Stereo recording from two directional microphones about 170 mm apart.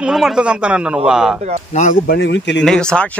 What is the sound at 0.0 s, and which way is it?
A man's voice, 5° right (ahead or behind).